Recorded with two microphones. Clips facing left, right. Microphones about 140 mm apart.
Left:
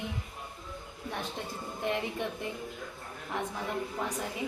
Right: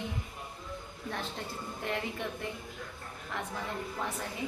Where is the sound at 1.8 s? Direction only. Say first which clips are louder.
Left 3 dB; 20° left (ahead or behind).